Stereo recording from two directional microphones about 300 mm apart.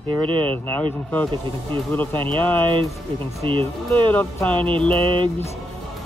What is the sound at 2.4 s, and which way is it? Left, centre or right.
Speech, centre.